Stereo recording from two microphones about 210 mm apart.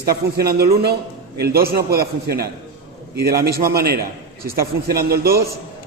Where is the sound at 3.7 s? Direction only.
50° right (ahead or behind).